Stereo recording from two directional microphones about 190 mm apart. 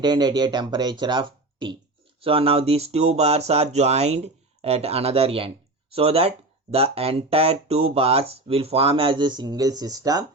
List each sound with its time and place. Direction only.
0.0 s speech: 20° right (ahead or behind)